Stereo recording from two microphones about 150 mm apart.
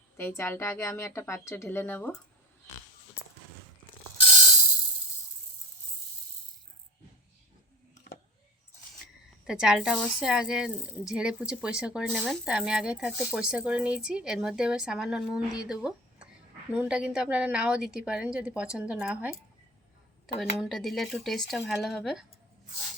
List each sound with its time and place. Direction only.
0.2 s speech: 15° left (ahead or behind)
9.5 s a woman's voice: 5° right (ahead or behind)
20.4 s speech: centre (ahead or behind)